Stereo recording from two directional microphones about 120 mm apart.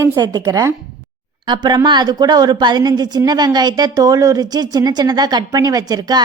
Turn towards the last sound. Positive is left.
turn(degrees=-35)  # may be behind; listen again after turning